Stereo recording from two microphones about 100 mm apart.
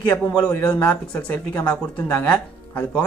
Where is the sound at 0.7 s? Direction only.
15° left (ahead or behind).